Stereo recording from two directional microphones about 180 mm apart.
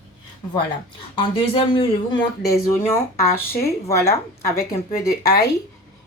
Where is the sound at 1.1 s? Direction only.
30° left (ahead or behind).